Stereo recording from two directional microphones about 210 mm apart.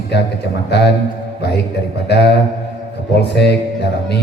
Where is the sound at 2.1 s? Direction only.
55° left (ahead or behind).